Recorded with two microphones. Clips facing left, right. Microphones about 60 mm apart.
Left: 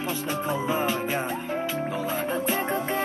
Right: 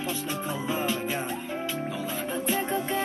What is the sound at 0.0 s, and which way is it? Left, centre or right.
Music, left.